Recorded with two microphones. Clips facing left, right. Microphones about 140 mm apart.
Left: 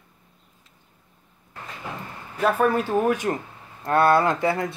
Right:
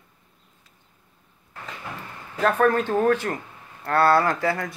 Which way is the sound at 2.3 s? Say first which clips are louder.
Right 1 dB; 5° left (ahead or behind).